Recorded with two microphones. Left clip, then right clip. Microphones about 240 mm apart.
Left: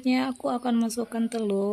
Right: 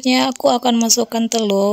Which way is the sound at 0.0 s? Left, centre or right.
Right.